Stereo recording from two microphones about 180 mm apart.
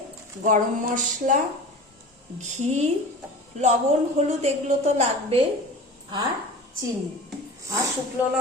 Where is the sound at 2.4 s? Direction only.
40° right (ahead or behind).